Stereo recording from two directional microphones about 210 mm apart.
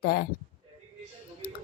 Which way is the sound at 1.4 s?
45° left (ahead or behind).